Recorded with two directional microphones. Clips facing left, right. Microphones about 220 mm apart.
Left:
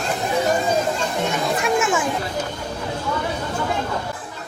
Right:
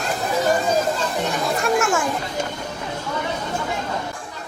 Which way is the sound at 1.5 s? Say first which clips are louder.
Right 1 dB; centre (ahead or behind).